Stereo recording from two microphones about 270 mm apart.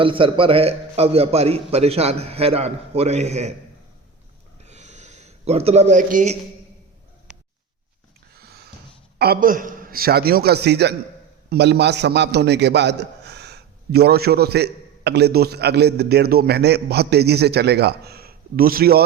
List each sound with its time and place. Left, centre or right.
0.0 s a man's voice: centre
4.6 s a sound: right
9.1 s a man's voice: right